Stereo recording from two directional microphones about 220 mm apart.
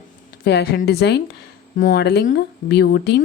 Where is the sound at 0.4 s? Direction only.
50° left (ahead or behind).